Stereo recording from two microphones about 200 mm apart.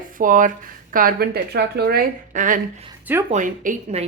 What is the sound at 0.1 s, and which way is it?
Speech, 40° right (ahead or behind).